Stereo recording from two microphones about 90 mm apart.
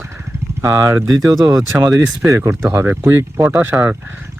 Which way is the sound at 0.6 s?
35° right (ahead or behind).